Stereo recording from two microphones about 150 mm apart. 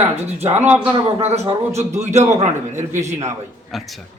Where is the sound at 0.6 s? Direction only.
10° right (ahead or behind).